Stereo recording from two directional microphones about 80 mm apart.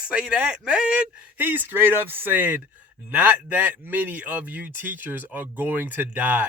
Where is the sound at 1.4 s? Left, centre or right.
Right.